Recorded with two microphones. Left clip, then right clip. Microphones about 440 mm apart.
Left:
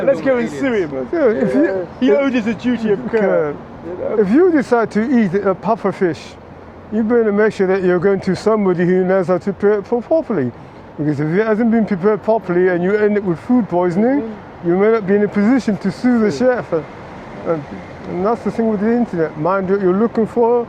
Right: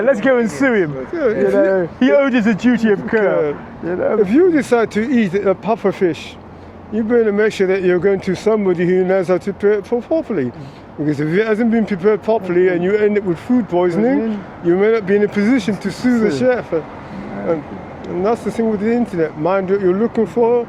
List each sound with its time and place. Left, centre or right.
0.0 s speech: right
1.1 s speech: left
2.0 s speech: right
4.2 s speech: centre
18.5 s speech: centre